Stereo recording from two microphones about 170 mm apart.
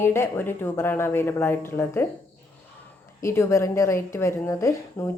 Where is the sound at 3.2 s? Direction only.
15° left (ahead or behind).